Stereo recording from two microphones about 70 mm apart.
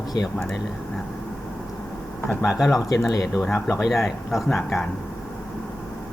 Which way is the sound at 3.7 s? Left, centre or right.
Centre.